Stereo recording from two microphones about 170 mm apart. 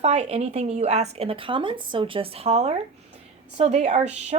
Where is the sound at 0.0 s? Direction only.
40° right (ahead or behind).